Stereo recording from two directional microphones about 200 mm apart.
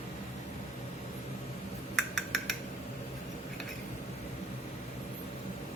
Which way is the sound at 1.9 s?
Centre (ahead or behind).